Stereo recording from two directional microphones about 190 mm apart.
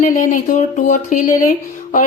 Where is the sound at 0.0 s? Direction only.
40° left (ahead or behind).